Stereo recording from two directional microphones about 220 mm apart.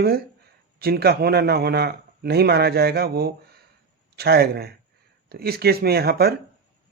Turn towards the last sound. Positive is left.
turn(degrees=-45)  # may be behind; listen again after turning